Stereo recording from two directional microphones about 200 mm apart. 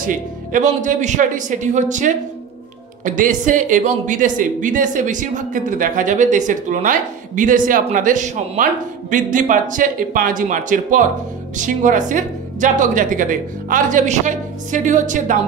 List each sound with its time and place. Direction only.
0.0 s speech: 40° right (ahead or behind)